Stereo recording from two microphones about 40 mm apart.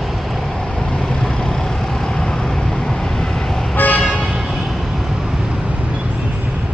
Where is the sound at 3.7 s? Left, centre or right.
Left.